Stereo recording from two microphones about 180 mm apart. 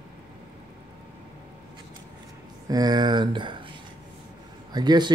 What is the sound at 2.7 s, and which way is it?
Speech, 20° right (ahead or behind).